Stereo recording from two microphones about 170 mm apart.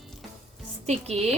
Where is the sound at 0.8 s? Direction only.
40° right (ahead or behind).